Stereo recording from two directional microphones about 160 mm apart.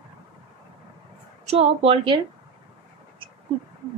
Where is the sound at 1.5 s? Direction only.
35° right (ahead or behind).